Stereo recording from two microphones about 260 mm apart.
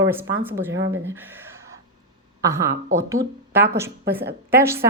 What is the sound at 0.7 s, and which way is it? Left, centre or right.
Speech, right.